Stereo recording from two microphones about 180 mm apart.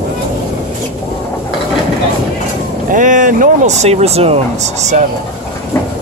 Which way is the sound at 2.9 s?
45° right (ahead or behind).